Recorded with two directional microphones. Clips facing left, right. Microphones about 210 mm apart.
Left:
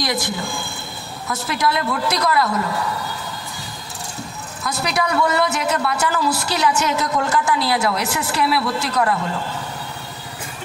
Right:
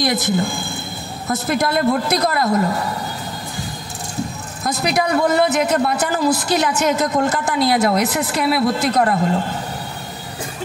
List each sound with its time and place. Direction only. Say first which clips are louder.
1.2 s a woman's voice: right 3 dB; 50° right (ahead or behind)
4.8 s a woman's voice: right 3 dB; 50° right (ahead or behind)